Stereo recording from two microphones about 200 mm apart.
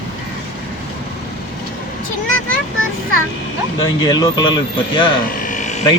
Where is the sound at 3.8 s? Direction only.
20° left (ahead or behind).